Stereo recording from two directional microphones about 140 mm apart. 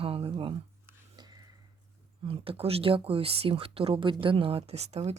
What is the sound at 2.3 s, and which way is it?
Speech, 40° right (ahead or behind).